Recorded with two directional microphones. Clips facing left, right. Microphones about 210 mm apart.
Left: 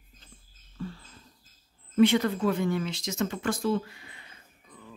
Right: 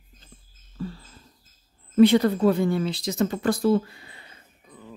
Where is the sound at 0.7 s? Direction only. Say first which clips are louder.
Right 4 dB; 35° right (ahead or behind).